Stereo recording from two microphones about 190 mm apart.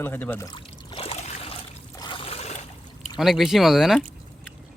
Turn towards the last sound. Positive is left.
turn(degrees=0)  # may be behind; listen again after turning